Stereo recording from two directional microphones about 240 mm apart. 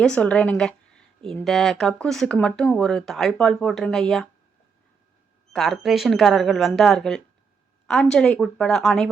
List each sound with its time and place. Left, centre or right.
0.0 s a woman's voice: centre
5.5 s a woman's voice: centre